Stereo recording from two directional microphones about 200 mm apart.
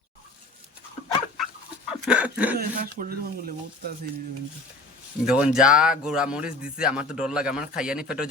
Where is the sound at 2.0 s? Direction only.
5° right (ahead or behind).